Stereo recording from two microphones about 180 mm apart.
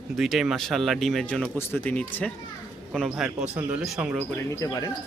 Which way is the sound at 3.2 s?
10° right (ahead or behind).